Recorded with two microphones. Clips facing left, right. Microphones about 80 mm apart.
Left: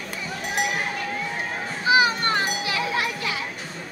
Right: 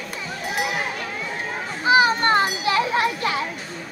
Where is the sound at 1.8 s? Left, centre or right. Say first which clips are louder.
Right 3 dB; right.